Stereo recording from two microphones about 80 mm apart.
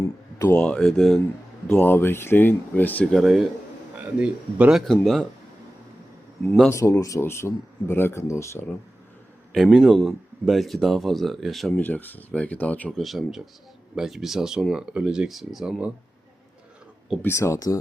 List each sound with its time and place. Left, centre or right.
0.6 s speech: centre
1.8 s speech: left
3.2 s speech: centre
4.0 s a man's voice: centre
4.9 s speech: centre
6.4 s speech: centre
6.7 s speech: left
9.5 s speech: centre
11.8 s speech: left
13.0 s speech: centre
17.2 s speech: left